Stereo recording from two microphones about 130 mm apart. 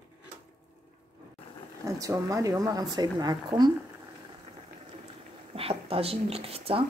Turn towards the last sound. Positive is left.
turn(degrees=-50)  # may be behind; listen again after turning